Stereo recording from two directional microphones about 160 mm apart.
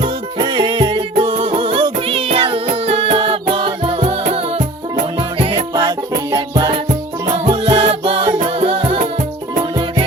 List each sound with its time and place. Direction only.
0.0 s music: 30° right (ahead or behind)